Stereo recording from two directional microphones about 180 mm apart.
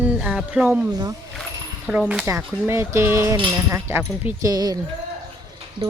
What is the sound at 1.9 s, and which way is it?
Speech, 5° right (ahead or behind).